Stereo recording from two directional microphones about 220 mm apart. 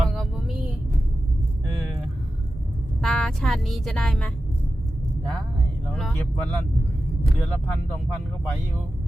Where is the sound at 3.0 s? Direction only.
Centre (ahead or behind).